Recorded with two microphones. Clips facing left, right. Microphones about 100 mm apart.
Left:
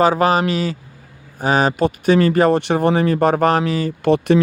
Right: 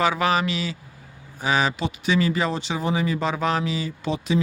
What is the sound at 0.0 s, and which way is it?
Speech, 40° left (ahead or behind).